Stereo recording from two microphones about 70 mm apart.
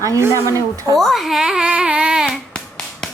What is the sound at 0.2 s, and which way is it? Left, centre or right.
Speech, right.